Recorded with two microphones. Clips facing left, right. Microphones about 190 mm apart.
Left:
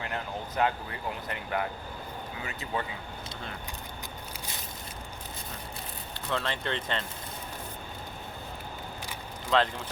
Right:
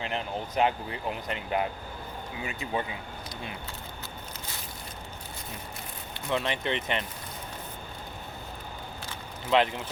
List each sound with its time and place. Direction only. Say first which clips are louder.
0.0 s speech: right 3 dB; 20° right (ahead or behind)
6.3 s speech: right 3 dB; 15° right (ahead or behind)
9.5 s speech: right 2 dB; 20° right (ahead or behind)